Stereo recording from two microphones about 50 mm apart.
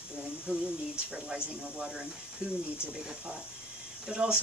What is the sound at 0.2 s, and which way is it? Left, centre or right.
Speech, centre.